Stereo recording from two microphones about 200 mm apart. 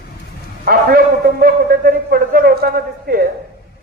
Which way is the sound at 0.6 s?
45° right (ahead or behind).